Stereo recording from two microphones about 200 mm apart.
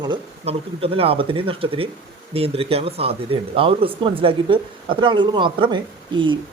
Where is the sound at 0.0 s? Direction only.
25° right (ahead or behind).